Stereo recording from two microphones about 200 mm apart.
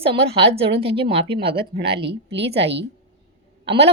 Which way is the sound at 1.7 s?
55° right (ahead or behind).